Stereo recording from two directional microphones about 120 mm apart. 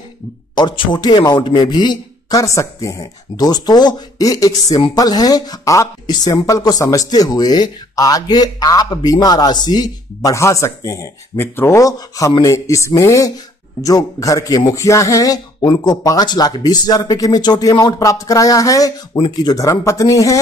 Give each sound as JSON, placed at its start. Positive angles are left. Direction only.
{"t": 0.6, "sound": "a man's voice", "side_deg": 40}
{"t": 2.4, "sound": "speech", "side_deg": 25}